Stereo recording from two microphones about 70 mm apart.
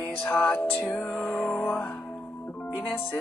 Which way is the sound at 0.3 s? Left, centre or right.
Left.